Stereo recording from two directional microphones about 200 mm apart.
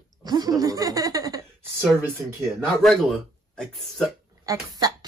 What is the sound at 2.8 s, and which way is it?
Speech, centre (ahead or behind).